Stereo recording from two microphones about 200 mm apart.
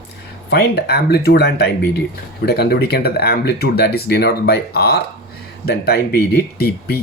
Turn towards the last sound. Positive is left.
turn(degrees=50)  # may be behind; listen again after turning